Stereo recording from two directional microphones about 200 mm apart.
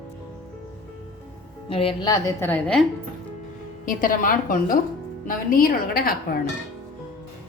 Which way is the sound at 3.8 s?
45° left (ahead or behind).